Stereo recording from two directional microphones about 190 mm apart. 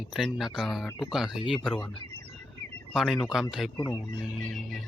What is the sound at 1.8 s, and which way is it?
Speech, 25° left (ahead or behind).